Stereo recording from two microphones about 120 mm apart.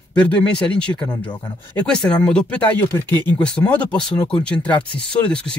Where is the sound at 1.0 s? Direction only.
40° left (ahead or behind).